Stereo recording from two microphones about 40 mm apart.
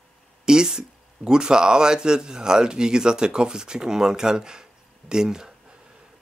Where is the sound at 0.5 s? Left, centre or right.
Centre.